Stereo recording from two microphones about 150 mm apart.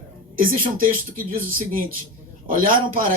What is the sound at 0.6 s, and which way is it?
A man's voice, 70° right (ahead or behind).